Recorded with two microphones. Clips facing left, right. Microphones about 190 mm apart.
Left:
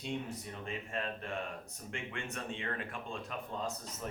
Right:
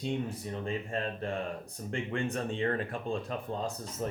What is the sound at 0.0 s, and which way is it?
Speech, 35° right (ahead or behind).